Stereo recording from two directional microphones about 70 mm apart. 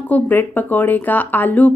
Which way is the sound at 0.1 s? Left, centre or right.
Left.